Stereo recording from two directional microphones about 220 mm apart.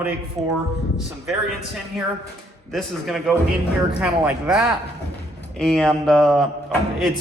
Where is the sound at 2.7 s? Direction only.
Centre (ahead or behind).